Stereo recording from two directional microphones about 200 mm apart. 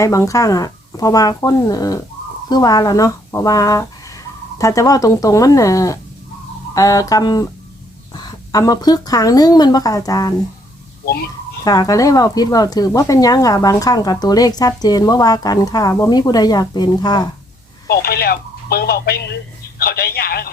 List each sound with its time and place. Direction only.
0.0 s speech: 15° left (ahead or behind)
11.0 s a child's voice: 50° left (ahead or behind)
11.6 s speech: 20° left (ahead or behind)
17.8 s speech: 50° left (ahead or behind)